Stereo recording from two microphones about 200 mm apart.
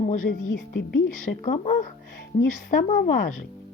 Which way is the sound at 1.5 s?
40° left (ahead or behind).